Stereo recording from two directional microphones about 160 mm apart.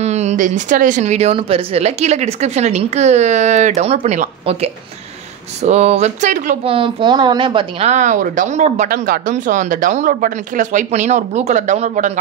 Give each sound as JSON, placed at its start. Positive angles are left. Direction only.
{"t": 0.0, "sound": "speech", "side_deg": -45}
{"t": 6.6, "sound": "a woman's voice", "side_deg": -35}
{"t": 7.9, "sound": "speech", "side_deg": -50}